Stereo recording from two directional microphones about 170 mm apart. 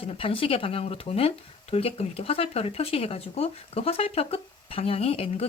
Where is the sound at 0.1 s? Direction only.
35° left (ahead or behind).